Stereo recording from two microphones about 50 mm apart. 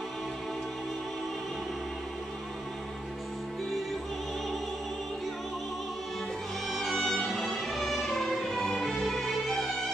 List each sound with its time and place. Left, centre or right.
6.7 s music: centre